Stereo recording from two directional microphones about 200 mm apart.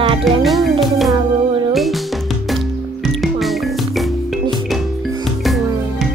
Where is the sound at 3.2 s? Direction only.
Centre (ahead or behind).